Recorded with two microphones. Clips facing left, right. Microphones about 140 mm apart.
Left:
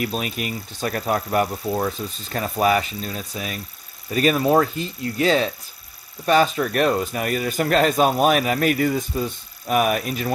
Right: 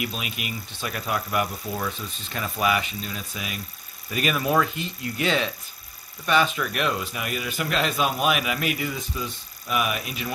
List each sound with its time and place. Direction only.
0.0 s speech: 40° left (ahead or behind)